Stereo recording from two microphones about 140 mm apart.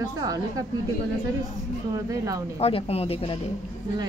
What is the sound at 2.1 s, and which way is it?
Speech, 25° right (ahead or behind).